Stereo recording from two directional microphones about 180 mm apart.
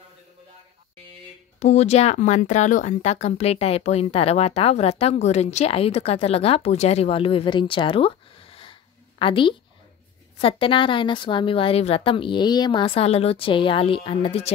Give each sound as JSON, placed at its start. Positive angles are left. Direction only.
{"t": 1.6, "sound": "speech", "side_deg": 40}